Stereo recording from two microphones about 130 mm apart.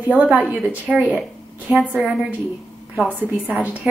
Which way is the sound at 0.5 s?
10° right (ahead or behind).